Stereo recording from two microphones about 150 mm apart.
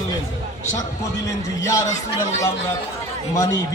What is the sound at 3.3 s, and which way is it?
Speech, 20° left (ahead or behind).